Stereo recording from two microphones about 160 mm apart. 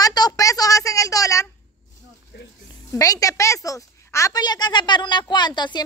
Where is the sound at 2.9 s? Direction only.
20° left (ahead or behind).